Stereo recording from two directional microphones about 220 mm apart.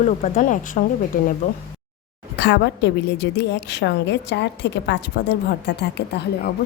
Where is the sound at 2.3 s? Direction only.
50° left (ahead or behind).